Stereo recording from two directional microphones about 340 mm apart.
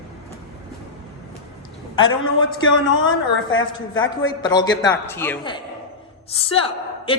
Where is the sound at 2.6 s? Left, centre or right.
Left.